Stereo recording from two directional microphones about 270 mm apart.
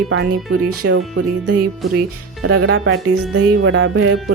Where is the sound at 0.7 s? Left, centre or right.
Right.